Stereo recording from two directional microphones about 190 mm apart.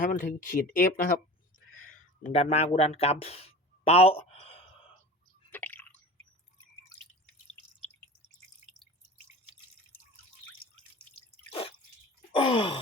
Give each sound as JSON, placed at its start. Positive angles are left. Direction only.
{"t": 0.0, "sound": "speech", "side_deg": 45}
{"t": 2.2, "sound": "speech", "side_deg": 35}
{"t": 5.5, "sound": "drip", "side_deg": 10}
{"t": 12.3, "sound": "gasp", "side_deg": 30}